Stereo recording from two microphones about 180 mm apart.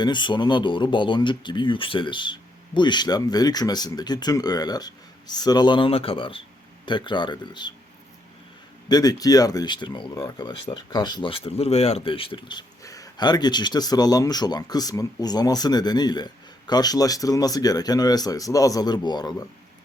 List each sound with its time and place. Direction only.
0.0 s speech: 25° left (ahead or behind)
8.9 s speech: 20° left (ahead or behind)